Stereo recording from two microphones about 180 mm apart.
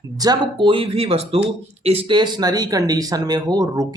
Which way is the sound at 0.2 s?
25° right (ahead or behind).